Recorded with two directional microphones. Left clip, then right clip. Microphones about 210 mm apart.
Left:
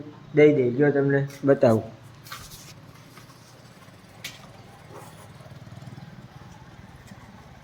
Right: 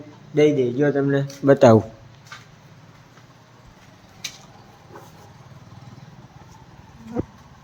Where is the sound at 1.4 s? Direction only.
45° right (ahead or behind).